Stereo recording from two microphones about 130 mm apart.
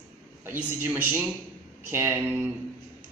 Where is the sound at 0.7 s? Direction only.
15° right (ahead or behind).